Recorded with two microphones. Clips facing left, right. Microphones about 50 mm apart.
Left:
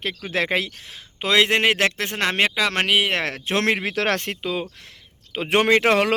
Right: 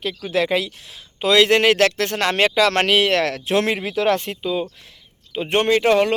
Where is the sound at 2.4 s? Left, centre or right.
Centre.